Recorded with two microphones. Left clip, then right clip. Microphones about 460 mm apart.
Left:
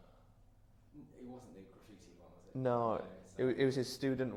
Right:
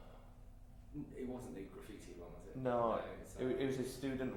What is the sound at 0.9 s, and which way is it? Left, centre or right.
Speech, centre.